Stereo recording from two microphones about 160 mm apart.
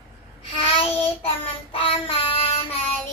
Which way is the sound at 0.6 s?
35° left (ahead or behind).